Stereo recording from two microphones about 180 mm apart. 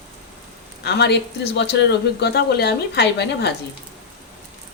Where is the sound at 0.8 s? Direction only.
65° left (ahead or behind).